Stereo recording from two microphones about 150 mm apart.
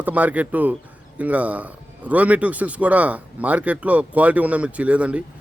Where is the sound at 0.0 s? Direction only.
10° right (ahead or behind).